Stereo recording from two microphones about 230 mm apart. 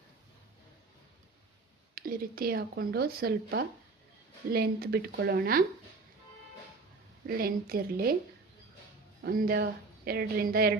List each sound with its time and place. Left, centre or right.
2.0 s speech: right
7.3 s speech: right
9.2 s speech: right